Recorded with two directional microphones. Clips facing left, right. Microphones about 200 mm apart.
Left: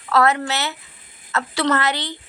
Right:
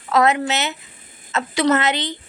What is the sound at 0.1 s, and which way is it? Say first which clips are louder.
A woman's voice: right 1 dB; 20° right (ahead or behind).